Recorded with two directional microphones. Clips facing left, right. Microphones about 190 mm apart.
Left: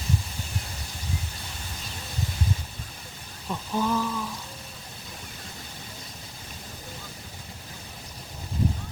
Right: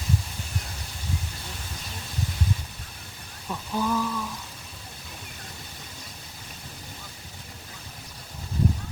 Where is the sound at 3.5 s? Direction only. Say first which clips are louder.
Left 1 dB; 10° left (ahead or behind).